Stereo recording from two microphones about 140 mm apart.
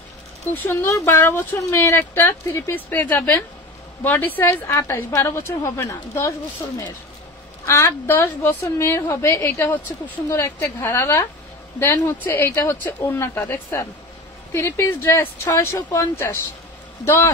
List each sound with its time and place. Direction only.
0.5 s speech: 15° left (ahead or behind)
7.6 s speech: 20° left (ahead or behind)